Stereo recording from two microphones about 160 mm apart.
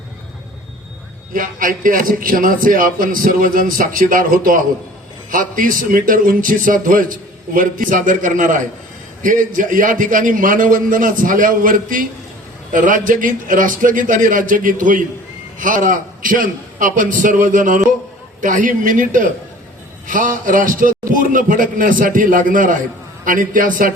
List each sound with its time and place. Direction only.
1.3 s a man's voice: 60° right (ahead or behind)